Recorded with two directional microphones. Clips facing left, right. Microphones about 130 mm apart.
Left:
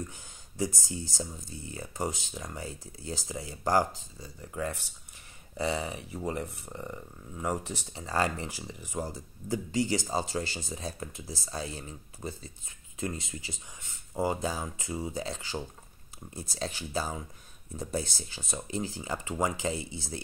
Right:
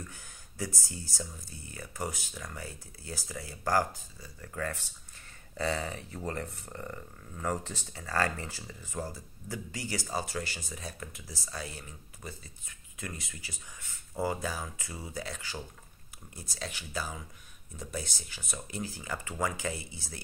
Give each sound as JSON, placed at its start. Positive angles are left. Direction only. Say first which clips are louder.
{"t": 0.0, "sound": "speech", "louder": "left 6 dB", "side_deg": 20}